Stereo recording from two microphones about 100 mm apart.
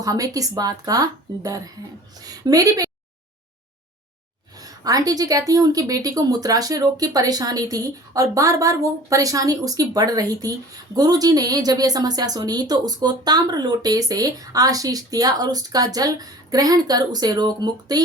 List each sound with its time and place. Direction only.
0.0 s a woman's voice: 35° right (ahead or behind)
4.5 s a woman's voice: 40° right (ahead or behind)